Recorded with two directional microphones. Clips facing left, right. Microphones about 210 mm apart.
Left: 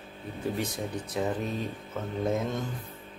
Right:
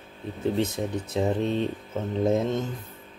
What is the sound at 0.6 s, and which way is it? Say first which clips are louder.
Speech: right 6 dB; 25° right (ahead or behind).